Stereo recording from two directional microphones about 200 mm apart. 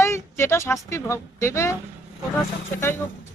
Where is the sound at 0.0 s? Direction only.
15° left (ahead or behind).